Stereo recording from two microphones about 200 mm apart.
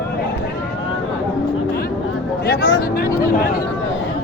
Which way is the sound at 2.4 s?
60° left (ahead or behind).